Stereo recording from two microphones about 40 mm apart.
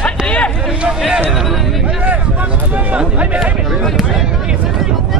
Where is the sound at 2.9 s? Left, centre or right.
Right.